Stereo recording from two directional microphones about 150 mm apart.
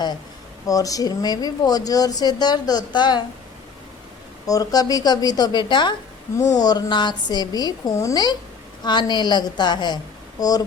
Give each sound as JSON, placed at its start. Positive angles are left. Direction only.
{"t": 0.7, "sound": "speech", "side_deg": 25}
{"t": 4.4, "sound": "speech", "side_deg": 25}